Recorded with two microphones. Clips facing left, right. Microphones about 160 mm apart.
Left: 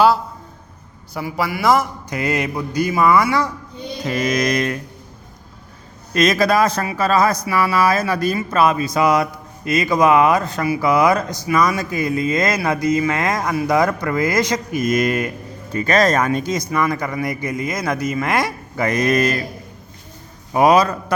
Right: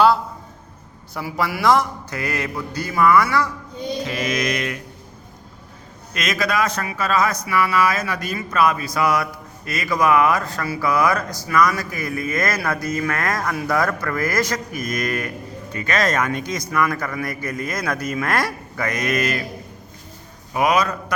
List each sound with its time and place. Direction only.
1.1 s a man's voice: centre (ahead or behind)
2.0 s speech: 20° left (ahead or behind)
4.0 s mantra: 40° left (ahead or behind)
6.1 s speech: 35° left (ahead or behind)
15.7 s speech: 35° left (ahead or behind); by 18.5 s 15° left (ahead or behind)
18.8 s speech: 30° left (ahead or behind)
20.5 s speech: 35° left (ahead or behind)